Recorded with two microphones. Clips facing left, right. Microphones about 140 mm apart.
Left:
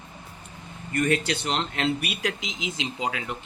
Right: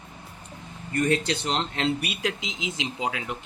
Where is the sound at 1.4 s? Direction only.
5° left (ahead or behind).